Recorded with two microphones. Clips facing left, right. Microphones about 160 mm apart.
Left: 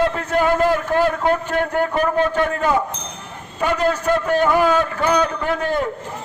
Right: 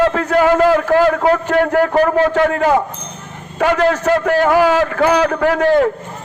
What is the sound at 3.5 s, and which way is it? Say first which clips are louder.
A man's voice: right 5 dB; 65° right (ahead or behind).